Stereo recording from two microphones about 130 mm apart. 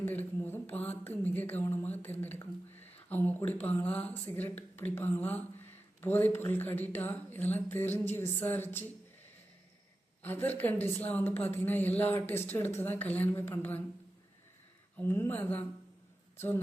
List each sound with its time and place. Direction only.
0.0 s speech: 15° left (ahead or behind)
10.2 s speech: 15° left (ahead or behind)
14.9 s speech: 15° left (ahead or behind)